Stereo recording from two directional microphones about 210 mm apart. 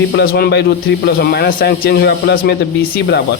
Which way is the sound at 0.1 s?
50° left (ahead or behind).